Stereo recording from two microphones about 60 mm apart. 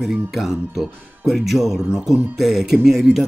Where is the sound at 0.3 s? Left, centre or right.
Centre.